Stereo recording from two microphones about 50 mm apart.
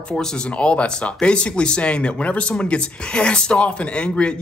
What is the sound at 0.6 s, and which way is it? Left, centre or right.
Speech, left.